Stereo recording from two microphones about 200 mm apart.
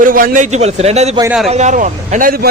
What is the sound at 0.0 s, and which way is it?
A man's voice, 45° right (ahead or behind).